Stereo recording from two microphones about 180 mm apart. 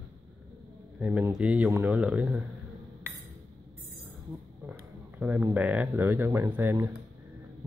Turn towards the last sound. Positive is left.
turn(degrees=-10)  # may be behind; listen again after turning